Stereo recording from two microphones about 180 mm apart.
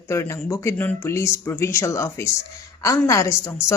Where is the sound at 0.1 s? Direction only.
15° left (ahead or behind).